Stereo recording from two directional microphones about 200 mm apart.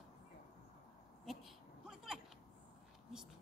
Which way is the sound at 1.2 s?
Centre (ahead or behind).